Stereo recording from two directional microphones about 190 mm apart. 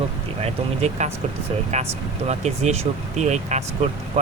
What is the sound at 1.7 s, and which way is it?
Speech, 35° right (ahead or behind).